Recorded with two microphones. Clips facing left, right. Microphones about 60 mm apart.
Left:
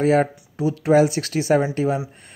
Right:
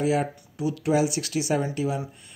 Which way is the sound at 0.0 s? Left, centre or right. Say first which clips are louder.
Left 6 dB; left.